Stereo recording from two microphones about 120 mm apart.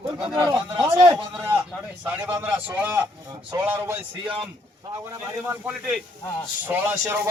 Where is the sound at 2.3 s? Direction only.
20° right (ahead or behind).